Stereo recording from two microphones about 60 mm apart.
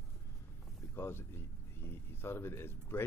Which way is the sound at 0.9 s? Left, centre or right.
Left.